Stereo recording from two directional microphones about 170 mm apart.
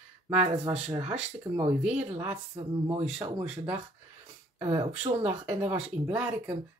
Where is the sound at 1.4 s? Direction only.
20° right (ahead or behind).